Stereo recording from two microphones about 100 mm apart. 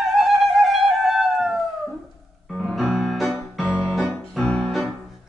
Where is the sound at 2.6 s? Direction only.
Centre (ahead or behind).